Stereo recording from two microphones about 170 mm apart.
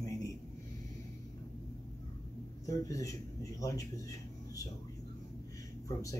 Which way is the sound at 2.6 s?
20° left (ahead or behind).